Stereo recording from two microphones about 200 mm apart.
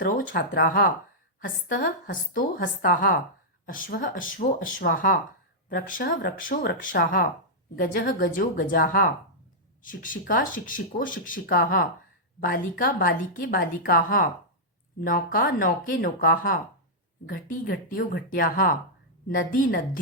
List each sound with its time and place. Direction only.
0.0 s speech: 45° left (ahead or behind)